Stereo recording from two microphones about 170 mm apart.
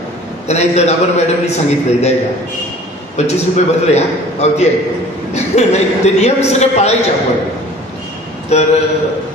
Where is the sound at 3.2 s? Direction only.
40° left (ahead or behind).